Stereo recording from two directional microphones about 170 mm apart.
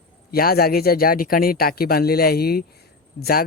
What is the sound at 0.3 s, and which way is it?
Speech, 60° left (ahead or behind).